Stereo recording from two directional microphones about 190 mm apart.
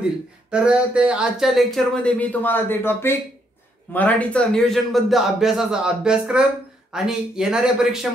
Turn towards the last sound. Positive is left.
turn(degrees=-5)  # may be behind; listen again after turning